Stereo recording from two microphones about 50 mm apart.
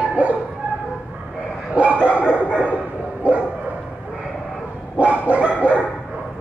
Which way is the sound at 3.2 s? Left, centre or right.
Right.